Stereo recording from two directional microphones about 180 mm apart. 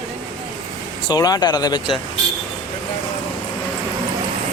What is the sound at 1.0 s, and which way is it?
Speech, 20° left (ahead or behind).